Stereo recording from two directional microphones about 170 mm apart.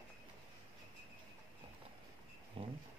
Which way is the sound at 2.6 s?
30° right (ahead or behind).